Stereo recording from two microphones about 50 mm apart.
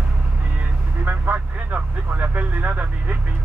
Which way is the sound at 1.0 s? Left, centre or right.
Right.